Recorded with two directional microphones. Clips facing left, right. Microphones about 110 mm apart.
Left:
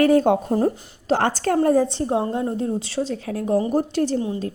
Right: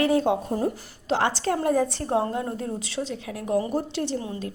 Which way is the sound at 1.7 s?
35° left (ahead or behind).